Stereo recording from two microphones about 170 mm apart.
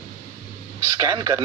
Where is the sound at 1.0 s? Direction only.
20° right (ahead or behind).